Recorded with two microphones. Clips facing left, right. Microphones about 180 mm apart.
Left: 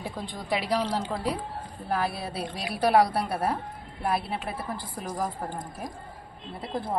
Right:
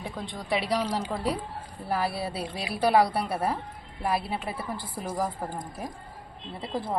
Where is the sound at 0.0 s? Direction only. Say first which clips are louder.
Left 1 dB; 5° left (ahead or behind).